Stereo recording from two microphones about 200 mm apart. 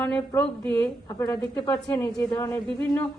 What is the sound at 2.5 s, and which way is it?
Speech, 5° left (ahead or behind).